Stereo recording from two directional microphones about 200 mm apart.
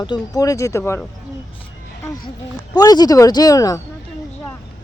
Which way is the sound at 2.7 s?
20° left (ahead or behind).